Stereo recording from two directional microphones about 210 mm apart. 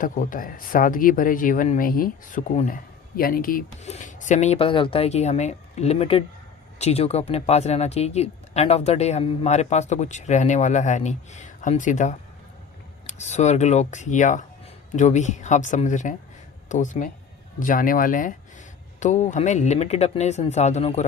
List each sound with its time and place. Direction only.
0.0 s speech: 40° left (ahead or behind)